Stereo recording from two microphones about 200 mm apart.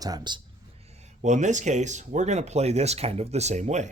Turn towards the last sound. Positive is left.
turn(degrees=-35)  # may be behind; listen again after turning